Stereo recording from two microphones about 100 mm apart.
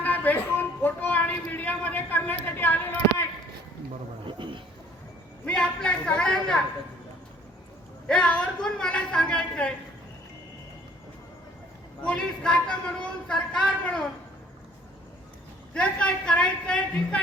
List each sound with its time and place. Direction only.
0.0 s a sound: 15° left (ahead or behind)
4.3 s a sound: 55° right (ahead or behind)
5.5 s a man's voice: 10° left (ahead or behind)
8.0 s a woman's voice: 10° left (ahead or behind)
12.0 s a woman's voice: 10° left (ahead or behind)
15.7 s a woman's voice: 10° left (ahead or behind)